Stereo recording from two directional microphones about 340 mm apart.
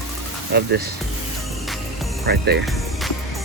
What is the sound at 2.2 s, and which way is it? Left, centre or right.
Speech, right.